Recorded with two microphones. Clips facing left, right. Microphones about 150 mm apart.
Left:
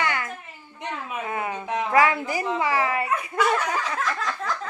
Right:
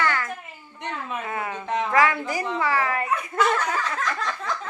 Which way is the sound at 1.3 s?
20° left (ahead or behind).